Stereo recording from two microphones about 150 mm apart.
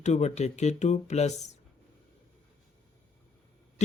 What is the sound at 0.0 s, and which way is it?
Speech, 50° left (ahead or behind).